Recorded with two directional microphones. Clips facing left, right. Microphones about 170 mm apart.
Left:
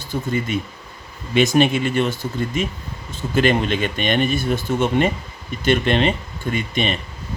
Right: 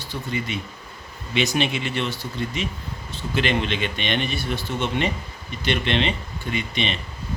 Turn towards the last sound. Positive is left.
turn(degrees=45)  # may be behind; listen again after turning